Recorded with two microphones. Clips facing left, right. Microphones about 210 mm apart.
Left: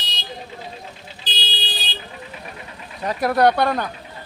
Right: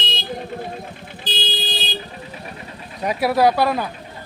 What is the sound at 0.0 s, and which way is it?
Vehicle, 55° right (ahead or behind).